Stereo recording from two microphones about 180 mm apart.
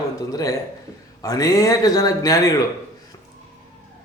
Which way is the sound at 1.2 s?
20° left (ahead or behind).